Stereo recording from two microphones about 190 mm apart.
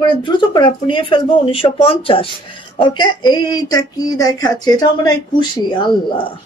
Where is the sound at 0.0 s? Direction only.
25° left (ahead or behind).